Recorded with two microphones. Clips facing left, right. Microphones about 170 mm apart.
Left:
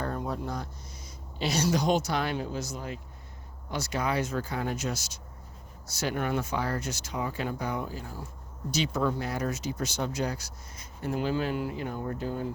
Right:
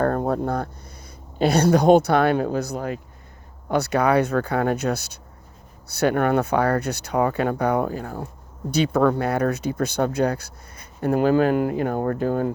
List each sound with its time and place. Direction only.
0.0 s speech: 55° right (ahead or behind)